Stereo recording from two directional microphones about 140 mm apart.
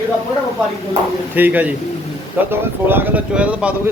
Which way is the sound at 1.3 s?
15° right (ahead or behind).